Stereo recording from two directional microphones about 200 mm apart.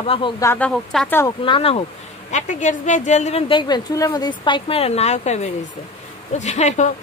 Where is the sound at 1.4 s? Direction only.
25° left (ahead or behind).